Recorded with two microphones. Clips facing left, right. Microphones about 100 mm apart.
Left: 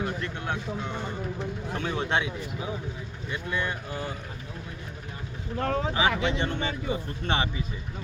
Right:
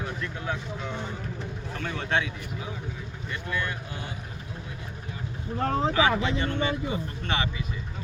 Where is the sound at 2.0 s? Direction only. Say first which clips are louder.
Even; 25° left (ahead or behind).